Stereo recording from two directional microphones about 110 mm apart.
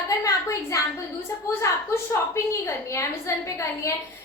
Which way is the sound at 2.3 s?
25° left (ahead or behind).